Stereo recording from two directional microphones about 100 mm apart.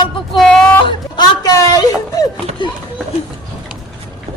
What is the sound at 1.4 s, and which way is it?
Speech, 35° left (ahead or behind).